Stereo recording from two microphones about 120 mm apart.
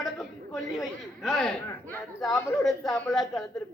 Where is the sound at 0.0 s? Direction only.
Centre (ahead or behind).